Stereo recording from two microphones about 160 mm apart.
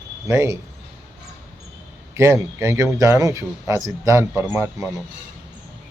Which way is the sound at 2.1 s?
15° right (ahead or behind).